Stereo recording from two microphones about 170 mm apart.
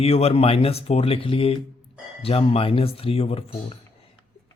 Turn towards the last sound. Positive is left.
turn(degrees=35)  # may be behind; listen again after turning